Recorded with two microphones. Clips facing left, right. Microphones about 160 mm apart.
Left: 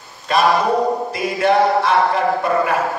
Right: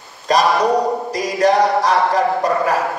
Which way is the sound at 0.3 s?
40° right (ahead or behind).